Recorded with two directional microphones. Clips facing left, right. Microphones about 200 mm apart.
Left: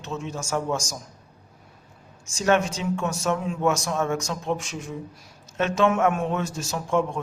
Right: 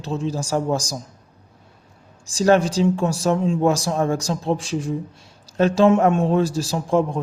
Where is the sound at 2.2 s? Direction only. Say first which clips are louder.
Right 5 dB; 35° right (ahead or behind).